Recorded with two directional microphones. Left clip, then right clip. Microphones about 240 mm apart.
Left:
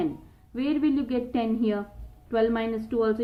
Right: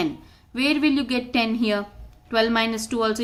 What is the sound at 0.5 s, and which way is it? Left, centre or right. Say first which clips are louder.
A woman's voice: right 5 dB; centre.